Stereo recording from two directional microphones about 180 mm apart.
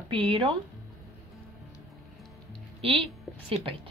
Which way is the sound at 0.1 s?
30° right (ahead or behind).